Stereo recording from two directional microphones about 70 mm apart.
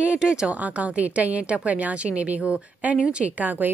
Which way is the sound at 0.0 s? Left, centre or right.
Centre.